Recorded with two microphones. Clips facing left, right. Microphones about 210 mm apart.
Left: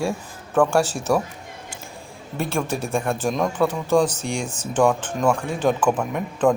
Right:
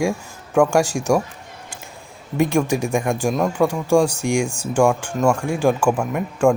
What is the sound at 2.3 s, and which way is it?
Speech, 15° right (ahead or behind).